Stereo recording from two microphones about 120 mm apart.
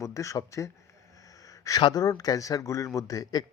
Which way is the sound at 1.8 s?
35° left (ahead or behind).